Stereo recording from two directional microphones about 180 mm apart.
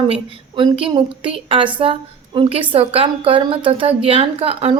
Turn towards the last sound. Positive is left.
turn(degrees=-30)  # may be behind; listen again after turning